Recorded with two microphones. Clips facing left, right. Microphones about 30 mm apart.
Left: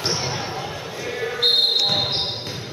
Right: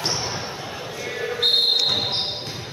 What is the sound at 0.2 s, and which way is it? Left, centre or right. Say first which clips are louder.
Basketball bounce: left 2 dB; centre.